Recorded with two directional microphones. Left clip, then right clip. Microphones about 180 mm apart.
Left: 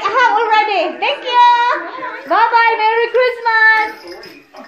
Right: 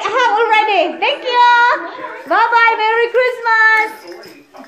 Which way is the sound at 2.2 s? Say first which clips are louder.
Even; 10° left (ahead or behind).